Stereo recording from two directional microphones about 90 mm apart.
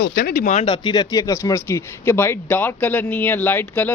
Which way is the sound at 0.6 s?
60° left (ahead or behind).